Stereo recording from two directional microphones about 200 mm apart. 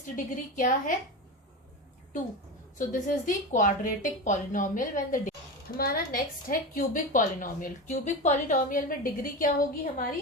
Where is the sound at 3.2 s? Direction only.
40° left (ahead or behind).